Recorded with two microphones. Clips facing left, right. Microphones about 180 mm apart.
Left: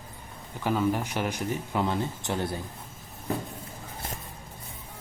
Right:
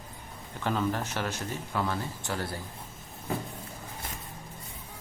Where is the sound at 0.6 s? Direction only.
10° left (ahead or behind).